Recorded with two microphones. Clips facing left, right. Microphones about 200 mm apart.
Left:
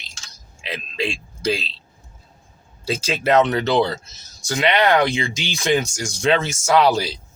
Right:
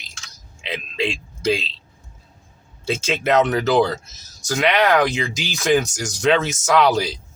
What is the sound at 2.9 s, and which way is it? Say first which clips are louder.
Speech: left 1 dB; 35° left (ahead or behind).